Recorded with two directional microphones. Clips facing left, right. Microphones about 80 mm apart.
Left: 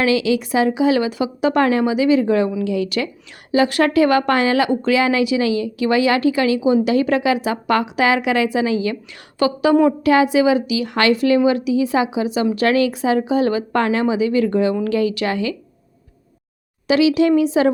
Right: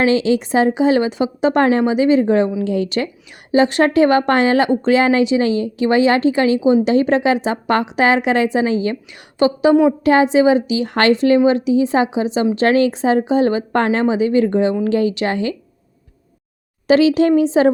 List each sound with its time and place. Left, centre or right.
0.0 s a woman's voice: right
16.8 s a woman's voice: right